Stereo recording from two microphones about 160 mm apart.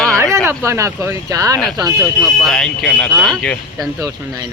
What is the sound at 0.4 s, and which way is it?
Speech, 15° right (ahead or behind).